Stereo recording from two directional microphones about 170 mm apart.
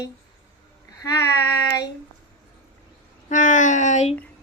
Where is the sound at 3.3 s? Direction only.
50° left (ahead or behind).